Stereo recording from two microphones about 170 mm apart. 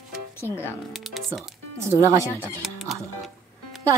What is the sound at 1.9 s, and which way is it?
Speech, 15° right (ahead or behind).